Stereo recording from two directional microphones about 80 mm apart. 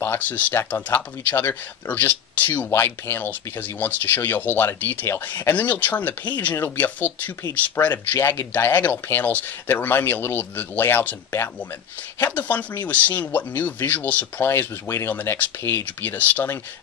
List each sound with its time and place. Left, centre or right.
0.0 s speech: left
5.5 s speech: left